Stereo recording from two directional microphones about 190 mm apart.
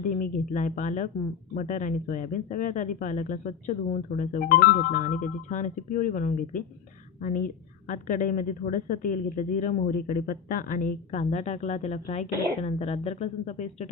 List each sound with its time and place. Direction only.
0.1 s a woman's voice: 45° left (ahead or behind)